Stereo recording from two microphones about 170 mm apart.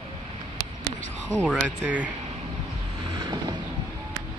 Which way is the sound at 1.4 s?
5° right (ahead or behind).